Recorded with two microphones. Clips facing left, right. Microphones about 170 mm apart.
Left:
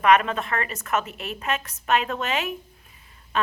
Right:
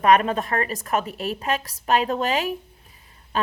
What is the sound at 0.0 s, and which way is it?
A woman's voice, 40° right (ahead or behind).